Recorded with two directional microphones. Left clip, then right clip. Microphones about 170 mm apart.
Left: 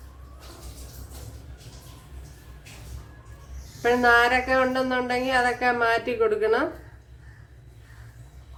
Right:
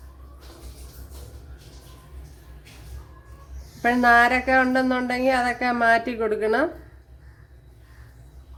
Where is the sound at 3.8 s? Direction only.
50° right (ahead or behind).